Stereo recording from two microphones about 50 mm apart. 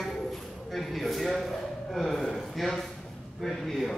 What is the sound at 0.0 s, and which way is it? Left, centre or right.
A man's voice, centre.